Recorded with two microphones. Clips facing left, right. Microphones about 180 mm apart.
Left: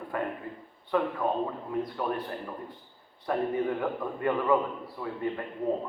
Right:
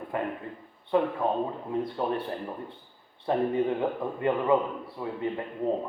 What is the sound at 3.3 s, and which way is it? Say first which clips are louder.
A man's voice: right 3 dB; 25° right (ahead or behind).